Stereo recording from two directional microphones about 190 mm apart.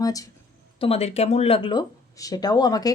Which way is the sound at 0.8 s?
30° left (ahead or behind).